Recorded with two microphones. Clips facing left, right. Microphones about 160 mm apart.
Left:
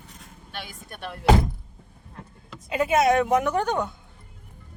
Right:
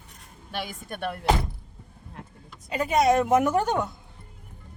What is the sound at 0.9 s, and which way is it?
Speech, 55° right (ahead or behind).